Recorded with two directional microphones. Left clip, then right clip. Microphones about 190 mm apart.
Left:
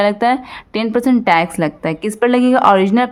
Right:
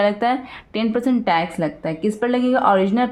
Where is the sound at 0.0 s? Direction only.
25° left (ahead or behind).